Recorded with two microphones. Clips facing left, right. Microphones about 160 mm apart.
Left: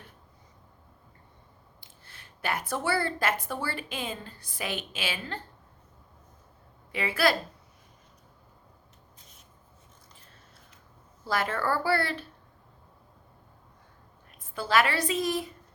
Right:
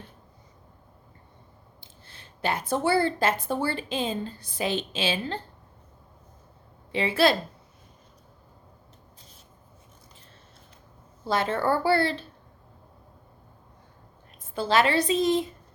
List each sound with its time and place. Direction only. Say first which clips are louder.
1.8 s a sound: right 4 dB; 25° right (ahead or behind)
3.4 s a woman's voice: right 6 dB; 25° right (ahead or behind)
6.9 s a woman's voice: right 4 dB; 25° right (ahead or behind)
11.3 s a woman's voice: right 4 dB; 25° right (ahead or behind)
14.5 s a woman's voice: right 3 dB; 25° right (ahead or behind)